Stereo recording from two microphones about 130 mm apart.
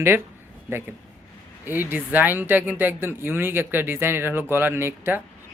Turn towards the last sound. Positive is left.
turn(degrees=-15)  # may be behind; listen again after turning